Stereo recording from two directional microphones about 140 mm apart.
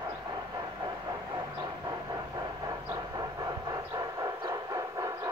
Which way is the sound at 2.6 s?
25° right (ahead or behind).